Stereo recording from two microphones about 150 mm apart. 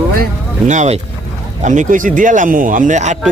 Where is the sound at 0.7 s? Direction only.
50° right (ahead or behind).